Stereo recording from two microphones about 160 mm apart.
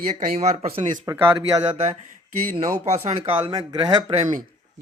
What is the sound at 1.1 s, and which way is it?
Speech, 20° right (ahead or behind).